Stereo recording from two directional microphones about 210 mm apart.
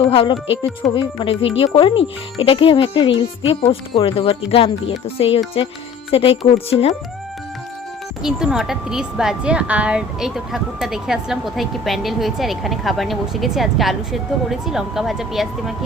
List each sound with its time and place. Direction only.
0.1 s speech: 25° left (ahead or behind)
8.2 s a woman's voice: 5° right (ahead or behind)